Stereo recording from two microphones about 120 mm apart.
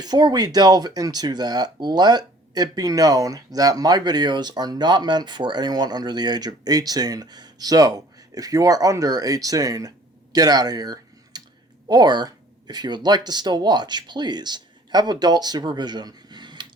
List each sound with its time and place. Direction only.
0.0 s speech: 35° right (ahead or behind)
10.3 s a sound: 30° right (ahead or behind)
11.9 s speech: 35° right (ahead or behind)